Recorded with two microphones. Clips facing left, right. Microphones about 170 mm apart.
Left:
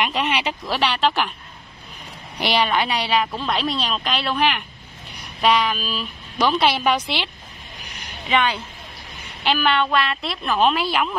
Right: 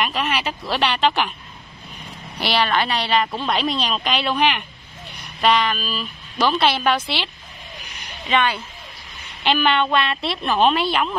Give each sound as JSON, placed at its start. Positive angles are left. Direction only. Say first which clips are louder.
{"t": 0.0, "sound": "speech", "louder": "left 1 dB", "side_deg": 20}
{"t": 0.7, "sound": "speech", "louder": "right 1 dB", "side_deg": 5}
{"t": 2.3, "sound": "a woman's voice", "louder": "even", "side_deg": 15}
{"t": 8.3, "sound": "a woman's voice", "louder": "even", "side_deg": 15}
{"t": 9.4, "sound": "speech", "louder": "right 1 dB", "side_deg": 5}